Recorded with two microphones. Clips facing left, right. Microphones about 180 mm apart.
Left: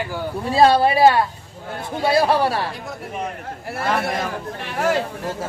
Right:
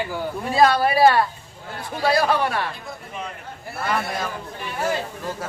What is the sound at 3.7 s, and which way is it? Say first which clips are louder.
A man's voice: left 3 dB; 70° left (ahead or behind).